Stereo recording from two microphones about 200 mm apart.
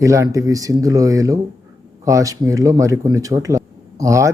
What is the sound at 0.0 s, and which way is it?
Speech, 15° right (ahead or behind).